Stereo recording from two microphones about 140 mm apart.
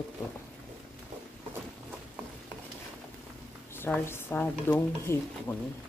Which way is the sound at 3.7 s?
15° left (ahead or behind).